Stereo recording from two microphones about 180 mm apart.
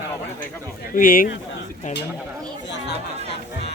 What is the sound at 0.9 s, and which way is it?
Speech, 50° left (ahead or behind).